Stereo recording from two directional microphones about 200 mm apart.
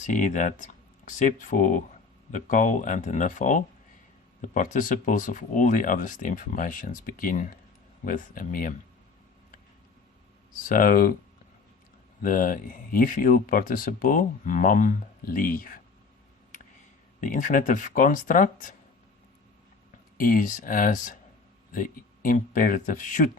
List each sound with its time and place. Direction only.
0.0 s speech: 40° left (ahead or behind)
10.7 s speech: 45° left (ahead or behind)
12.2 s speech: 40° left (ahead or behind)
17.2 s speech: 40° left (ahead or behind)
20.1 s speech: 45° left (ahead or behind)